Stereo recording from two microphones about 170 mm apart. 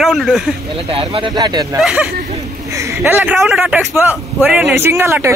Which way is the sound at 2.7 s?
15° right (ahead or behind).